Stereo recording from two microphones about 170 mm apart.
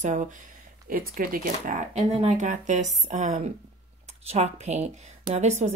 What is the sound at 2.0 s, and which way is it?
Speech, 40° right (ahead or behind).